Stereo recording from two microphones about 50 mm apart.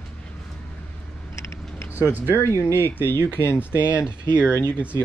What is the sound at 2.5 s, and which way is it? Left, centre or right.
Speech, left.